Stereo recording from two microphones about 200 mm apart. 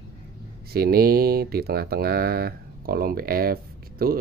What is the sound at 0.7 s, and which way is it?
Speech, 50° right (ahead or behind).